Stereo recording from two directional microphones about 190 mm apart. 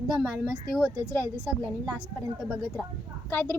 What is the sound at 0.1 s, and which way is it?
Speech, 5° right (ahead or behind).